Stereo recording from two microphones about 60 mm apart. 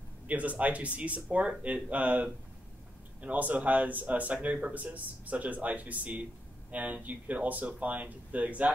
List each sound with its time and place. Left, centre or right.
0.3 s speech: right